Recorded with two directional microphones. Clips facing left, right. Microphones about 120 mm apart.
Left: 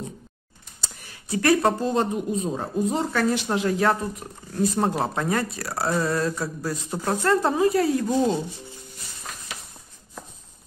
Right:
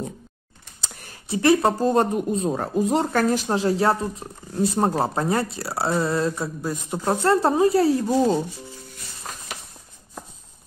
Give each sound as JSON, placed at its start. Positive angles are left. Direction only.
{"t": 1.3, "sound": "speech", "side_deg": -25}
{"t": 1.8, "sound": "speech", "side_deg": -50}
{"t": 3.4, "sound": "speech", "side_deg": -30}